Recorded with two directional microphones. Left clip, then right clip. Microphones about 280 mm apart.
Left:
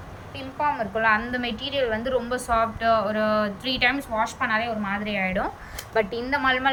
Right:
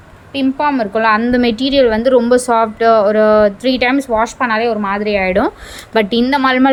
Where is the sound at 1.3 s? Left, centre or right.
Centre.